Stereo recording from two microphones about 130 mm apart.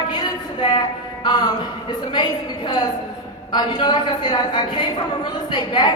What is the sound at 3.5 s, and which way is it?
A woman's voice, 35° left (ahead or behind).